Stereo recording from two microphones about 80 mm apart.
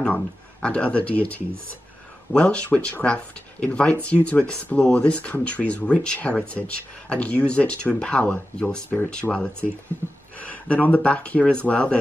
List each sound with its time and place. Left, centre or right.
0.0 s speech: centre
10.4 s speech: centre